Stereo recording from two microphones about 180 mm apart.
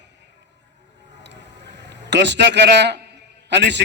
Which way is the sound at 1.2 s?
75° right (ahead or behind).